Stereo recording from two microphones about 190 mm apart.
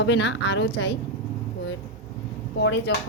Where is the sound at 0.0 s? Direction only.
65° left (ahead or behind).